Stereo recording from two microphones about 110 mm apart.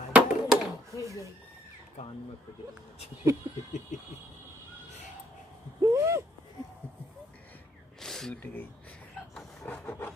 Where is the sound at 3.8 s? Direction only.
90° left.